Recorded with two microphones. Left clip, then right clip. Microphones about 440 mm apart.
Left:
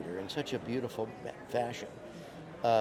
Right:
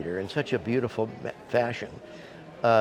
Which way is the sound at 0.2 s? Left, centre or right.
Right.